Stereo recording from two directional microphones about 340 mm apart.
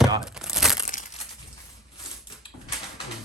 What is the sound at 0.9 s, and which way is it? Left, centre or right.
Crushing, left.